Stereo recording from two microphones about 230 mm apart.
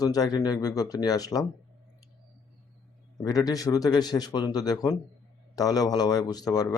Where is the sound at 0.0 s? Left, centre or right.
Centre.